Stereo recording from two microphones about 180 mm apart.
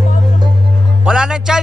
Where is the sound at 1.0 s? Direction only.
5° right (ahead or behind).